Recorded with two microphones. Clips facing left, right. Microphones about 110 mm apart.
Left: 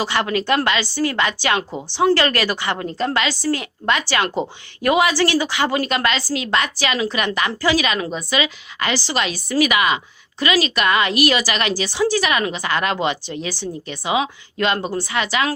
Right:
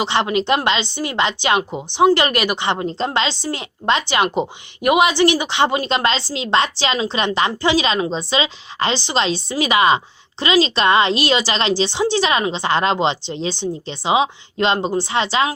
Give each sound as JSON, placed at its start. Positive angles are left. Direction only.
{"t": 0.0, "sound": "a woman's voice", "side_deg": -20}